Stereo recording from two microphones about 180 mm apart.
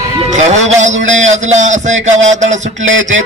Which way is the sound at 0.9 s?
90° right.